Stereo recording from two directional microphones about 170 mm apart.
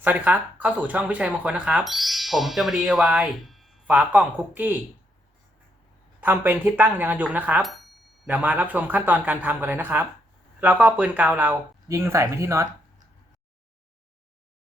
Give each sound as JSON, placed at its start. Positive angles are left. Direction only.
{"t": 0.0, "sound": "speech", "side_deg": -10}
{"t": 6.1, "sound": "speech", "side_deg": -10}